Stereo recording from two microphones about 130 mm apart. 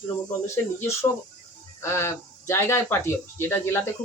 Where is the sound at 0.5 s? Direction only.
20° left (ahead or behind).